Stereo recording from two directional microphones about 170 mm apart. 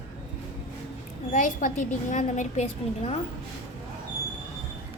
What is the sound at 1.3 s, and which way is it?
A woman's voice, 50° left (ahead or behind).